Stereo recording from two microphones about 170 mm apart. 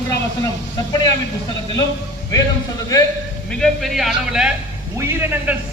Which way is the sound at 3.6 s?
Centre (ahead or behind).